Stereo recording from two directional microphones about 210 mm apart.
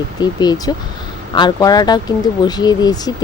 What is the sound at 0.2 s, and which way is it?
Speech, 20° left (ahead or behind).